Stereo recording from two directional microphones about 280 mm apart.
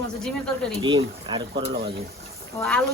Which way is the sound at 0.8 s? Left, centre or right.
Centre.